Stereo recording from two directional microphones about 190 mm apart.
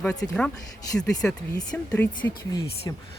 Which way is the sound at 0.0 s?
5° left (ahead or behind).